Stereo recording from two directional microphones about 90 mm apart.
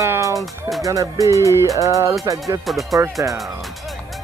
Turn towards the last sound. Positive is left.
turn(degrees=-35)  # may be behind; listen again after turning